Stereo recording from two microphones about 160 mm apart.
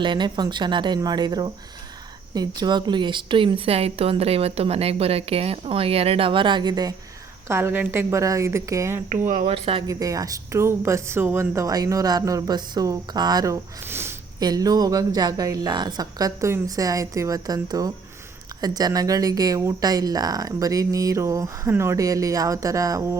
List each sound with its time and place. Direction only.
0.0 s speech: 30° right (ahead or behind)
7.4 s a woman's voice: 15° right (ahead or behind)
9.3 s speech: 35° right (ahead or behind)
9.8 s speech: 20° right (ahead or behind)